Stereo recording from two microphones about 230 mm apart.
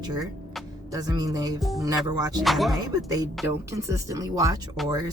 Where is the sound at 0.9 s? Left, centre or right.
Centre.